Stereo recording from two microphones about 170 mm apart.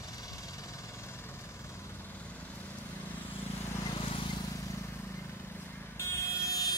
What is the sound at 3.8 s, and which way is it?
Vehicle, 30° left (ahead or behind).